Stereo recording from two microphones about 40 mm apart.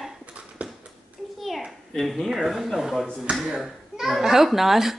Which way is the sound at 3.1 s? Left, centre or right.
Right.